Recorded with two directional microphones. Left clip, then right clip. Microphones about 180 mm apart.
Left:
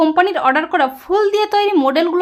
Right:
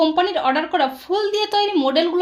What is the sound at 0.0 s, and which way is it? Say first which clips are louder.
A woman's voice: left 4 dB; 25° left (ahead or behind).